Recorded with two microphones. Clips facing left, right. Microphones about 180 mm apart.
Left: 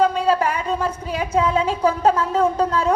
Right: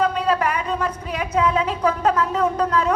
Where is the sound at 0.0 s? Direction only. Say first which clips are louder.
Left 2 dB; 30° left (ahead or behind).